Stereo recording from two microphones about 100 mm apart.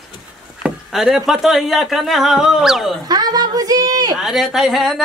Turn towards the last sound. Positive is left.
turn(degrees=0)  # may be behind; listen again after turning